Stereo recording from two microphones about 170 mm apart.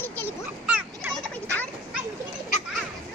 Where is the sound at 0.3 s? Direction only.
10° right (ahead or behind).